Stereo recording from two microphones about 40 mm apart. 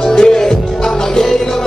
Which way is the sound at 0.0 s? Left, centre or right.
Centre.